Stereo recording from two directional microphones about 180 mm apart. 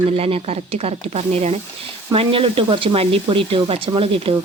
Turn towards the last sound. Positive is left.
turn(degrees=-30)  # may be behind; listen again after turning